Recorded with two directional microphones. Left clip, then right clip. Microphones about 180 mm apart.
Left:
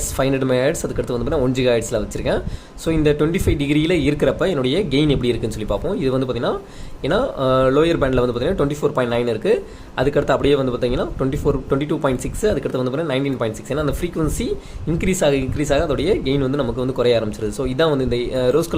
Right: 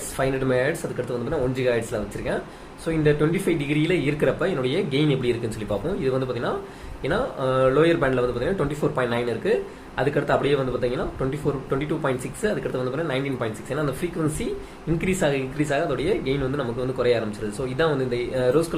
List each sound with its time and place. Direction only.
0.2 s a man's voice: 50° left (ahead or behind)
14.9 s speech: 45° left (ahead or behind)